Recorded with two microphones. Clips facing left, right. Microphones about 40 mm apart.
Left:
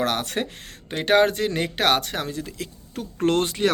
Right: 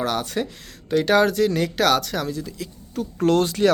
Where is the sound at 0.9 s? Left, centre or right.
Left.